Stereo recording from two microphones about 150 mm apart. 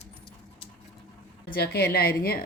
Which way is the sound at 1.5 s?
90° left.